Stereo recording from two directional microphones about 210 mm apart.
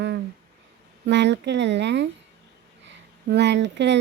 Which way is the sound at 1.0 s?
55° right (ahead or behind).